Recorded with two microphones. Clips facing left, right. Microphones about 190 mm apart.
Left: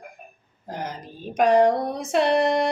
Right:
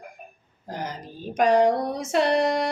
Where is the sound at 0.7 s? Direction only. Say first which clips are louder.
Left 1 dB; 55° left (ahead or behind).